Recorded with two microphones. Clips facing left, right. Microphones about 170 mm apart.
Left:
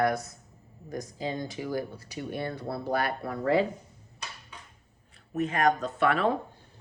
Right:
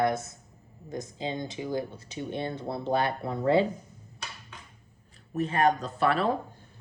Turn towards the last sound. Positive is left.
turn(degrees=-35)  # may be behind; listen again after turning